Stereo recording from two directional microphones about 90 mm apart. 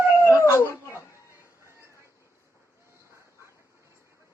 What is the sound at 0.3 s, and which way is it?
Dog, 30° left (ahead or behind).